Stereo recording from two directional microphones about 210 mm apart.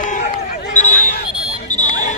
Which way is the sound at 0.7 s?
35° left (ahead or behind).